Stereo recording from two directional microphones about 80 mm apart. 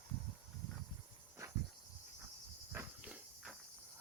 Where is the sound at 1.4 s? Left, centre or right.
Right.